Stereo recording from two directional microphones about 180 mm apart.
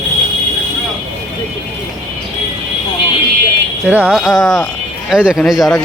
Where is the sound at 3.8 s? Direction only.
10° right (ahead or behind).